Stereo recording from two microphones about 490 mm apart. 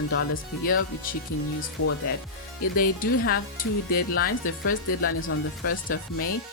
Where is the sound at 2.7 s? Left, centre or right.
Centre.